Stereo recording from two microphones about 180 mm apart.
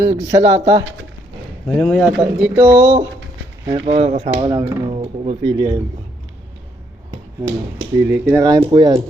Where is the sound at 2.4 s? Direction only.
10° right (ahead or behind).